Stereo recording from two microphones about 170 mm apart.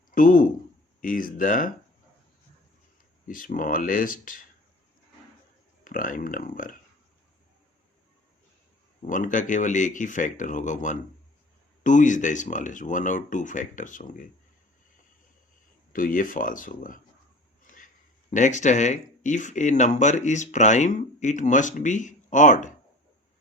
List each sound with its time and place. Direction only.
0.1 s speech: 55° left (ahead or behind)
3.2 s speech: 55° left (ahead or behind)
5.8 s speech: 55° left (ahead or behind)
9.0 s speech: 50° left (ahead or behind)
15.9 s speech: 55° left (ahead or behind)